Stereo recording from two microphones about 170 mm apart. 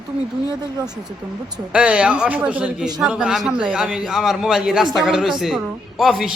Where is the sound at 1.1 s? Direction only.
5° right (ahead or behind).